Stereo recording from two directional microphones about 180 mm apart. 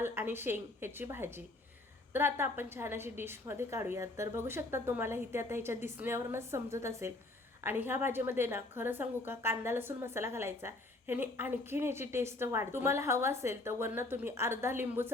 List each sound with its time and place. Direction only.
0.0 s a woman's voice: 15° right (ahead or behind)